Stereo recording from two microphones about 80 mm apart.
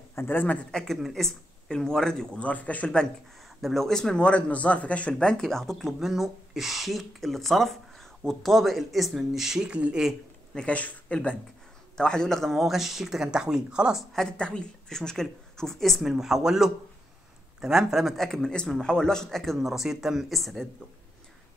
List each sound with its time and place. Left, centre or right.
0.1 s speech: left
0.7 s speech: centre
3.4 s speech: centre
10.5 s speech: centre
14.1 s speech: centre